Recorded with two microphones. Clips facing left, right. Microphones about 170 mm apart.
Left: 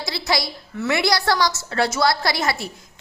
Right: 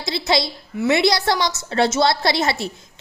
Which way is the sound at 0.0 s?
25° right (ahead or behind).